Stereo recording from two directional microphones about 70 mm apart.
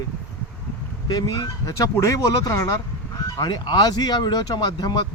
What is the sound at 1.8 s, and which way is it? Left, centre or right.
Speech, left.